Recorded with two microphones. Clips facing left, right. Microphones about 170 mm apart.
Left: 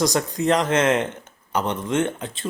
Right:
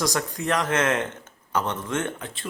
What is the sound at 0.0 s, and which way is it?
Speech, 20° left (ahead or behind).